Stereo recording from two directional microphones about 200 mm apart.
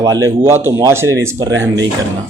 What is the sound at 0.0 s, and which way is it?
Speech, 15° right (ahead or behind).